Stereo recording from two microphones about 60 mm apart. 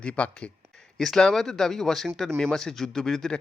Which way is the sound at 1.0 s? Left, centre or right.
Centre.